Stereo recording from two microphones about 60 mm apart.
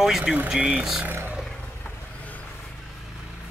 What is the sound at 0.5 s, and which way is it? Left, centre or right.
Speech, centre.